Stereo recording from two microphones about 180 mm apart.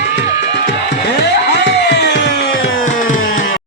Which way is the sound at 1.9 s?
70° left (ahead or behind).